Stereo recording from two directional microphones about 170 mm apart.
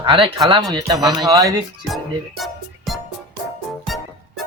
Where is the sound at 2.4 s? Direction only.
Centre (ahead or behind).